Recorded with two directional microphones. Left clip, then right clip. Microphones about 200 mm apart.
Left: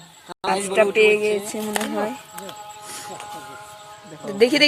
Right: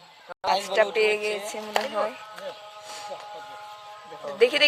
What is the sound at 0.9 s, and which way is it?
Speech, 15° right (ahead or behind).